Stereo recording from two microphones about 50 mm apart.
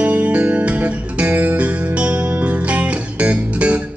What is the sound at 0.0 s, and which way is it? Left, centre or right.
Music, right.